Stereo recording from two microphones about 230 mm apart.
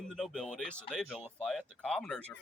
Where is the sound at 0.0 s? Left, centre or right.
Centre.